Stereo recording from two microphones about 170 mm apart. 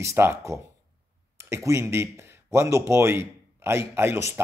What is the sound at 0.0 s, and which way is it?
Speech, 15° right (ahead or behind).